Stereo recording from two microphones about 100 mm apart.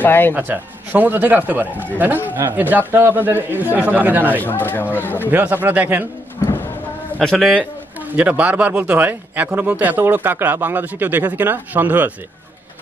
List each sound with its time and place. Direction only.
0.0 s speech: 20° left (ahead or behind)
0.3 s a man's voice: 20° right (ahead or behind)
4.4 s speech: 20° left (ahead or behind)
5.3 s a man's voice: 20° right (ahead or behind)
7.2 s a man's voice: centre (ahead or behind)
8.2 s a man's voice: 15° right (ahead or behind)